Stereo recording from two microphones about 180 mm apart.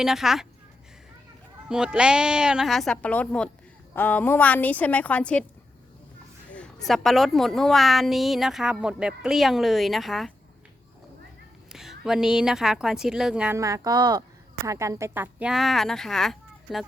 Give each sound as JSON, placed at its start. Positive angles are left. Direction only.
{"t": 0.0, "sound": "a woman's voice", "side_deg": 0}
{"t": 1.7, "sound": "a woman's voice", "side_deg": -5}
{"t": 6.5, "sound": "a woman's voice", "side_deg": 5}
{"t": 11.7, "sound": "a woman's voice", "side_deg": 0}
{"t": 13.6, "sound": "a woman's voice", "side_deg": -20}